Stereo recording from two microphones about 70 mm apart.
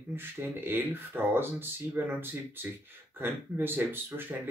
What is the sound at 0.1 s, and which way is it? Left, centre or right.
Speech, right.